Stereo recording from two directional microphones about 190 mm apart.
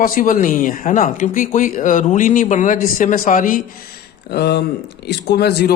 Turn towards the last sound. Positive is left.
turn(degrees=55)  # may be behind; listen again after turning